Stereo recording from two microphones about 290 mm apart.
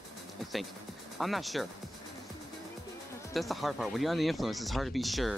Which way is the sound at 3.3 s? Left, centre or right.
Centre.